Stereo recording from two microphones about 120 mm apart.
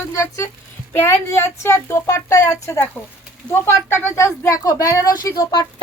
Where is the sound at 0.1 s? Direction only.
25° left (ahead or behind).